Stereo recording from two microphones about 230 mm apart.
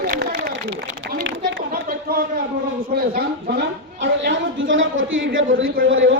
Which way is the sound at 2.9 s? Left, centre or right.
Right.